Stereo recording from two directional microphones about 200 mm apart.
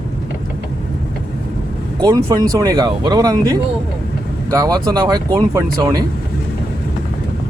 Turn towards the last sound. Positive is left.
turn(degrees=-20)  # may be behind; listen again after turning